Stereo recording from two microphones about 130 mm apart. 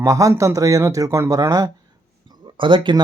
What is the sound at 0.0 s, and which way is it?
Speech, 25° right (ahead or behind).